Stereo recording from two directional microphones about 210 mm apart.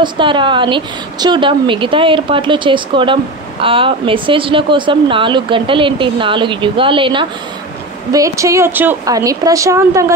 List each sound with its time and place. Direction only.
0.0 s speech: 25° right (ahead or behind)